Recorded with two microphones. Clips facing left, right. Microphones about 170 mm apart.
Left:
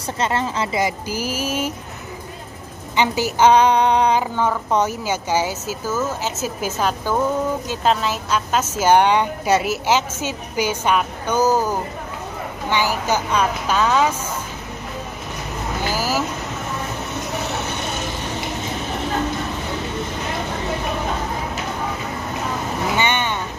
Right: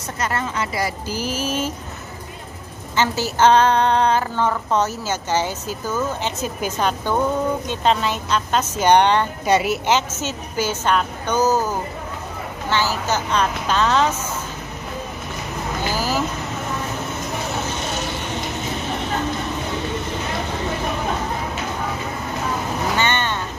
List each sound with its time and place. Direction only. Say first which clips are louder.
0.2 s a woman's voice: left 2 dB; 25° left (ahead or behind)
1.0 s a woman's voice: even; 10° left (ahead or behind)
3.0 s a woman's voice: left 1 dB; 15° left (ahead or behind)
12.6 s a woman's voice: left 1 dB; 15° left (ahead or behind)
15.9 s vehicle: even; 10° left (ahead or behind)
22.9 s vehicle: left 1 dB; 15° left (ahead or behind)